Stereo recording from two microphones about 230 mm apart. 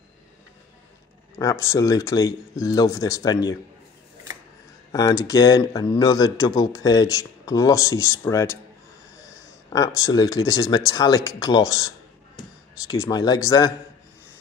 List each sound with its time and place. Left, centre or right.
1.3 s speech: centre
4.9 s speech: centre
9.7 s speech: centre